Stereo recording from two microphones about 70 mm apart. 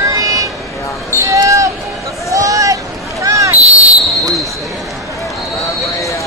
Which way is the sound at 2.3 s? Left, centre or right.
Right.